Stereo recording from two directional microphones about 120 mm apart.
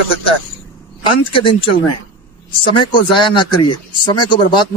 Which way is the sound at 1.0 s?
45° left (ahead or behind).